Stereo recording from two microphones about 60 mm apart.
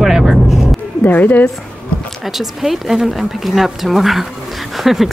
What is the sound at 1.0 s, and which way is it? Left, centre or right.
Speech, left.